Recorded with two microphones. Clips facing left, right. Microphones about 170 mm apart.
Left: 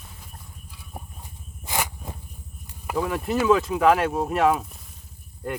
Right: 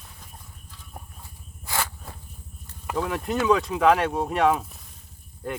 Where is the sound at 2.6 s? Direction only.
10° left (ahead or behind).